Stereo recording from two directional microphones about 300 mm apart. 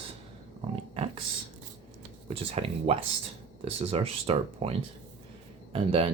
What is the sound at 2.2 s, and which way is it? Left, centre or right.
Speech, centre.